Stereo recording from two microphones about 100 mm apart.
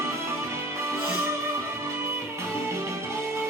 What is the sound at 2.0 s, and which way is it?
Music, 25° right (ahead or behind).